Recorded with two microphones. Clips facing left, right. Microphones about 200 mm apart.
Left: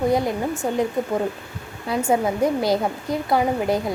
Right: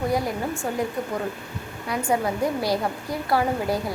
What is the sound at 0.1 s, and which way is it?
Speech, 20° left (ahead or behind).